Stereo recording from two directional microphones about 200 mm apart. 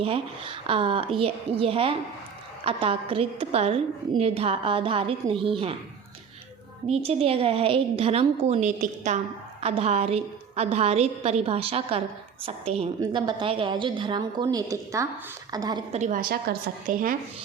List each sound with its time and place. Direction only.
0.0 s a woman's voice: 30° right (ahead or behind)
6.8 s a woman's voice: 30° right (ahead or behind)
15.9 s a woman's voice: 35° right (ahead or behind)